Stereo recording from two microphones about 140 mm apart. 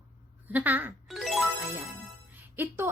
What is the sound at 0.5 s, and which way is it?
Speech, 15° right (ahead or behind).